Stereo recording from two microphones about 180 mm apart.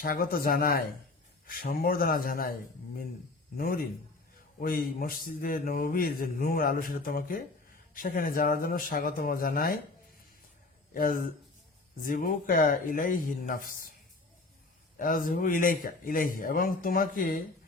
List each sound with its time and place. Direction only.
0.0 s a man's voice: 50° left (ahead or behind)
3.6 s a man's voice: 55° left (ahead or behind)
10.9 s a man's voice: 50° left (ahead or behind)
14.9 s a man's voice: 50° left (ahead or behind)